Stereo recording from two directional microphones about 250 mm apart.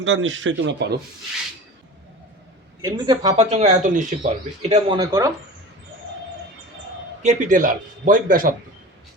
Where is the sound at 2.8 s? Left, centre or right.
Centre.